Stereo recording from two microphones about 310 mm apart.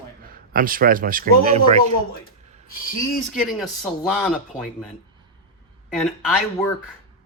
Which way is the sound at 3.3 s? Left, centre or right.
Centre.